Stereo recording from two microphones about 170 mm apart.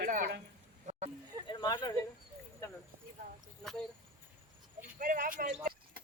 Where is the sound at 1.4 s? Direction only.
25° left (ahead or behind).